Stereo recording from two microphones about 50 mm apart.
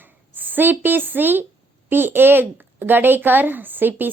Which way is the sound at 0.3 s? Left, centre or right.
Right.